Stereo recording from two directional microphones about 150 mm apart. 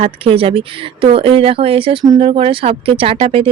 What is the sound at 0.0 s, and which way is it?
Speech, 35° right (ahead or behind).